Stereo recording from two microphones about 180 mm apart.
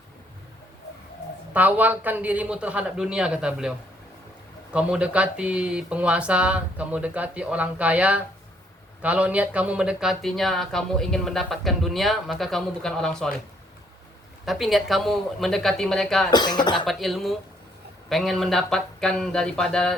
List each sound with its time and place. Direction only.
1.5 s speech: 10° right (ahead or behind)
14.4 s speech: centre (ahead or behind)
16.3 s speech: 25° left (ahead or behind)
16.8 s speech: centre (ahead or behind)